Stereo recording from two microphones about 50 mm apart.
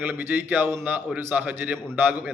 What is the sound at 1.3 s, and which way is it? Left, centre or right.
Speech, right.